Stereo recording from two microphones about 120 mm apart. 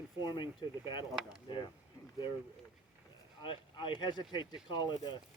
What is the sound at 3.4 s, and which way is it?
Speech, 40° left (ahead or behind).